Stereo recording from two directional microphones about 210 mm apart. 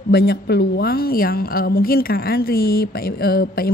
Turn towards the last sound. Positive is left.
turn(degrees=45)  # may be behind; listen again after turning